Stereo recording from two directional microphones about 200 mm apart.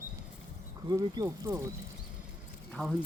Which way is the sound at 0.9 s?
15° right (ahead or behind).